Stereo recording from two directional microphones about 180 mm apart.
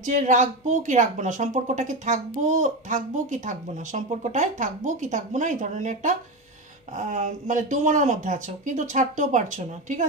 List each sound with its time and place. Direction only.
0.0 s speech: 45° right (ahead or behind)